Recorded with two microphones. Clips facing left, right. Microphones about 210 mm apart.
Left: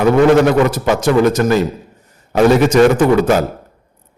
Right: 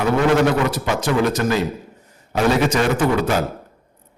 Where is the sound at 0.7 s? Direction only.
45° left (ahead or behind).